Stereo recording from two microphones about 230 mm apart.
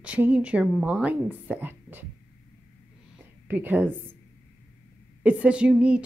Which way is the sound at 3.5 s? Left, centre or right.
Centre.